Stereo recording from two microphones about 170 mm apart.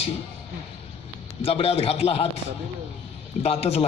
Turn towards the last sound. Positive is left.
turn(degrees=35)  # may be behind; listen again after turning